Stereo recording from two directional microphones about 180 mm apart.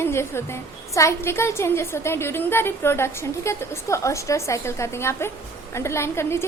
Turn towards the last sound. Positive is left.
turn(degrees=15)  # may be behind; listen again after turning